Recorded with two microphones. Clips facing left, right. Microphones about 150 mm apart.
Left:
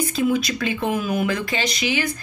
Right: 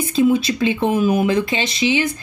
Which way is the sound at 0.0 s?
25° right (ahead or behind).